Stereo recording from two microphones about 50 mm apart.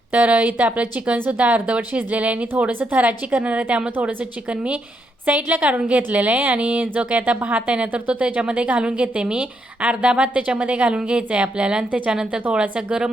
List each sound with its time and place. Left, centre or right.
0.1 s speech: right
5.2 s a woman's voice: right